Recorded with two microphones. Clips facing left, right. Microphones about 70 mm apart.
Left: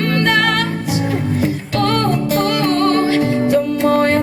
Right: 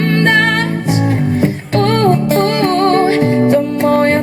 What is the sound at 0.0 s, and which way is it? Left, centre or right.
Music, right.